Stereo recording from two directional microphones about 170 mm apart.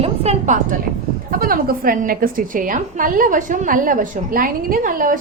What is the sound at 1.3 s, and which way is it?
A woman's voice, 60° right (ahead or behind).